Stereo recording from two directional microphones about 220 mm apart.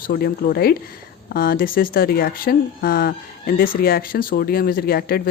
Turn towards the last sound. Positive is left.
turn(degrees=45)  # may be behind; listen again after turning